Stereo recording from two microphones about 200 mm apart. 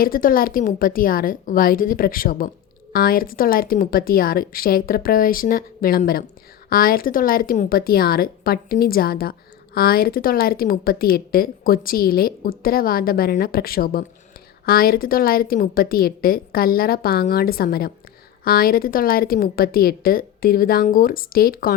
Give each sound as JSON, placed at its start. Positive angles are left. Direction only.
{"t": 0.0, "sound": "a woman's voice", "side_deg": 45}